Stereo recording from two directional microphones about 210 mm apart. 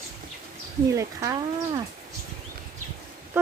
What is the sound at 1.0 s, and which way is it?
Speech, 15° right (ahead or behind).